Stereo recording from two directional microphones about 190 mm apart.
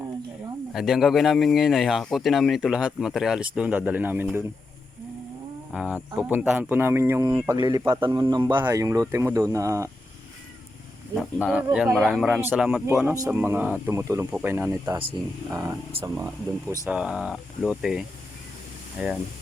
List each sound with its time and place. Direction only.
0.7 s speech: centre (ahead or behind)
5.7 s a man's voice: 5° right (ahead or behind)
11.1 s speech: centre (ahead or behind)
13.1 s speech: 15° right (ahead or behind)